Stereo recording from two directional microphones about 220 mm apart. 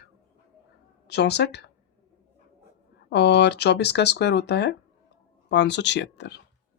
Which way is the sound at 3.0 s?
50° left (ahead or behind).